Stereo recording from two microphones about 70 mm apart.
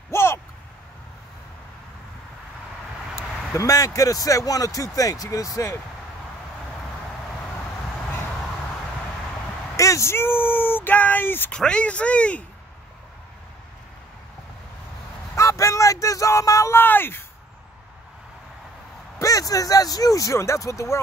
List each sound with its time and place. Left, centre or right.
0.1 s a sound: left
3.2 s speech: left
9.8 s speech: left
11.5 s speech: centre
15.3 s a sound: left
16.7 s speech: left
19.1 s speech: left